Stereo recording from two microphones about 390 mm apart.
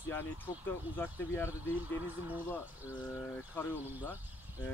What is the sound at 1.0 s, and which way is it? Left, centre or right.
Speech, centre.